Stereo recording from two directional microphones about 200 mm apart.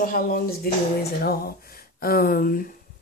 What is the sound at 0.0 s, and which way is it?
Speech, 45° left (ahead or behind).